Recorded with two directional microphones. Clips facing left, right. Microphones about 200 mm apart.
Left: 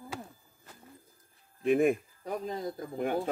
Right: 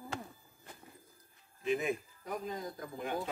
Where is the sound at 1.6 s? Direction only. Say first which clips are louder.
Left 9 dB; 55° left (ahead or behind).